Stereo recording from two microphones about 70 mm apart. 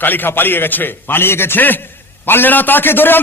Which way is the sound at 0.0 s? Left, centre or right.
Left.